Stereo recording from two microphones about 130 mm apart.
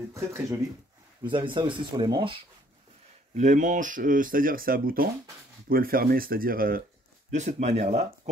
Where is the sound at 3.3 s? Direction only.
70° right (ahead or behind); by 6.8 s 90° right.